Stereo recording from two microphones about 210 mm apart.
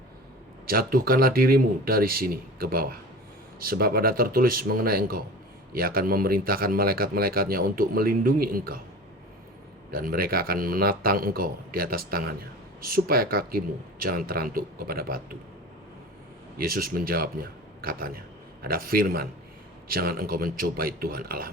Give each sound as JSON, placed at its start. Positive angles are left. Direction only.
{"t": 0.7, "sound": "speech", "side_deg": -45}
{"t": 9.9, "sound": "speech", "side_deg": -45}
{"t": 16.6, "sound": "speech", "side_deg": -45}